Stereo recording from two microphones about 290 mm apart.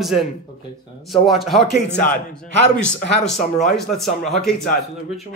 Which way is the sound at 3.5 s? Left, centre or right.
Centre.